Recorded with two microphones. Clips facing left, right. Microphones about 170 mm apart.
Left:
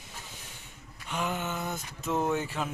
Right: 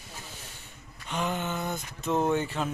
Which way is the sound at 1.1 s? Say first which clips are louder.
Right 2 dB; 5° left (ahead or behind).